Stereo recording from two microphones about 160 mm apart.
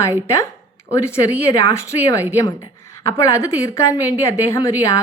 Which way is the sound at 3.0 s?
20° left (ahead or behind).